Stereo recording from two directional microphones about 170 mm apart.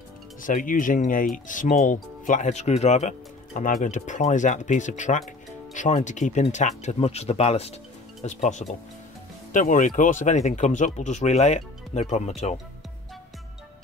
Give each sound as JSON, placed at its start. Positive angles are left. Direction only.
{"t": 0.4, "sound": "speech", "side_deg": 55}